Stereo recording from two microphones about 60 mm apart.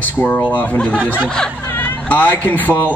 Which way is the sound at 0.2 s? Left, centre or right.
Left.